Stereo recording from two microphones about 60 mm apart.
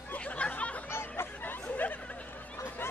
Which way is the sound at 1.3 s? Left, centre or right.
Left.